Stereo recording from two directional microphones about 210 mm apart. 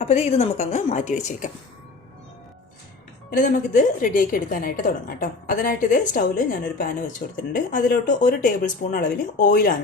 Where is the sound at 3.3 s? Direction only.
40° left (ahead or behind).